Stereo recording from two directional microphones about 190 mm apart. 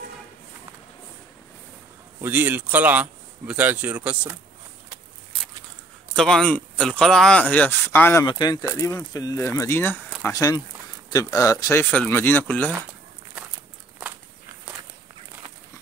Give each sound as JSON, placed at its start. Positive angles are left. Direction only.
{"t": 2.2, "sound": "speech", "side_deg": -10}
{"t": 6.1, "sound": "speech", "side_deg": 5}
{"t": 8.3, "sound": "speech", "side_deg": 20}